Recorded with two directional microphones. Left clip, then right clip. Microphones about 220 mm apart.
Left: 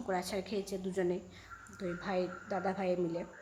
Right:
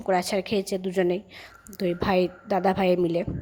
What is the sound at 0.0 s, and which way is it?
A woman's voice, 35° right (ahead or behind).